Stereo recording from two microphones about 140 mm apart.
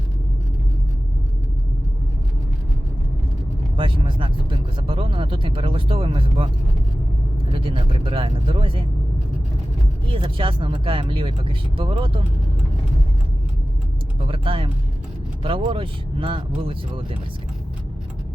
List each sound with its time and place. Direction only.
3.8 s speech: 35° right (ahead or behind)
7.5 s speech: 40° right (ahead or behind)
10.1 s speech: 40° right (ahead or behind)
14.2 s speech: 40° right (ahead or behind)